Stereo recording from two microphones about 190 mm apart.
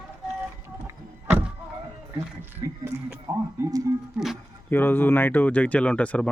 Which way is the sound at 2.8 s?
10° right (ahead or behind).